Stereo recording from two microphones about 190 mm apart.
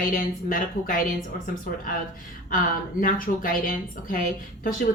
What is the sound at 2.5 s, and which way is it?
Speech, 50° left (ahead or behind).